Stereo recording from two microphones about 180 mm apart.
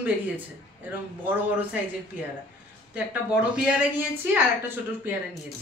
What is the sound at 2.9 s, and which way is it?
A man's voice, 5° right (ahead or behind).